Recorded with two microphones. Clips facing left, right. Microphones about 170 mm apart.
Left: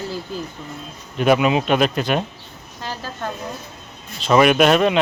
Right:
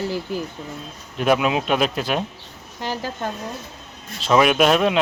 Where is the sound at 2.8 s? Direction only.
15° right (ahead or behind).